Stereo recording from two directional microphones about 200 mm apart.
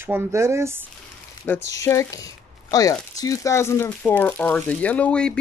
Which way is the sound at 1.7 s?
15° left (ahead or behind).